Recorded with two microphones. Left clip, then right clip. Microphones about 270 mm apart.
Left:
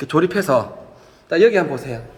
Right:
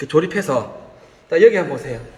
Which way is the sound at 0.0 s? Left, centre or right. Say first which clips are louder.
Even; centre.